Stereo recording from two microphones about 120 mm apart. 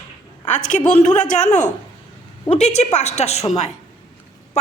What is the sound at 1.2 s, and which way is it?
Speech, 10° left (ahead or behind).